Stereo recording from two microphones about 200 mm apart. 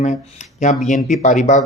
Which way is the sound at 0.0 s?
35° left (ahead or behind).